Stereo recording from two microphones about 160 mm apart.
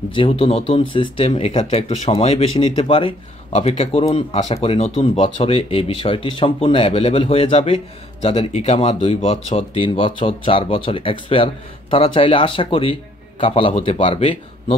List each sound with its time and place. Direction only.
0.1 s speech: 35° left (ahead or behind)